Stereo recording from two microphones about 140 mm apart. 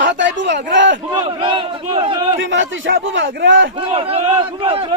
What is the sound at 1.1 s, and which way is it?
Speech, 35° right (ahead or behind).